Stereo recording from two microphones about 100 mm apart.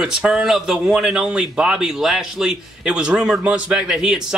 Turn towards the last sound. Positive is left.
turn(degrees=-10)  # may be behind; listen again after turning